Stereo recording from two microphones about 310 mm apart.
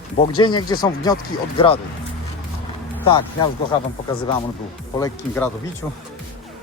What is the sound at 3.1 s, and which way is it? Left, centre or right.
Speech, centre.